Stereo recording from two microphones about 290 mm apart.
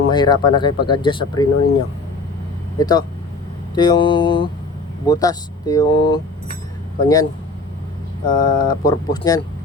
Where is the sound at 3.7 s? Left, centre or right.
Centre.